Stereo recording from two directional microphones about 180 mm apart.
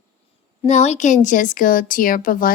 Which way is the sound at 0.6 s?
40° left (ahead or behind).